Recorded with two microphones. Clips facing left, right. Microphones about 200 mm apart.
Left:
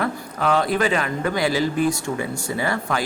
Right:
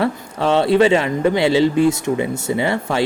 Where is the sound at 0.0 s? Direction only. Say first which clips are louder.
Right 4 dB; 30° right (ahead or behind).